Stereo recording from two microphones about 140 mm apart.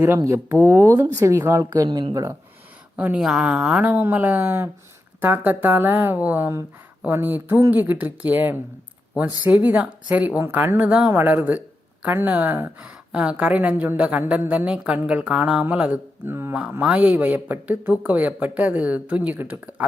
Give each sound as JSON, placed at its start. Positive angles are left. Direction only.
{"t": 0.0, "sound": "speech", "side_deg": -20}
{"t": 2.9, "sound": "a woman's voice", "side_deg": -10}